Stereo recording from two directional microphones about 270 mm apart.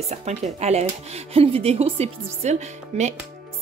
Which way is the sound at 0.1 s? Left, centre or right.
Right.